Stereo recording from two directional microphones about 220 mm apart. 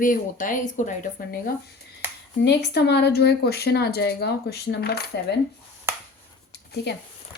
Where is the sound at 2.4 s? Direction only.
50° left (ahead or behind).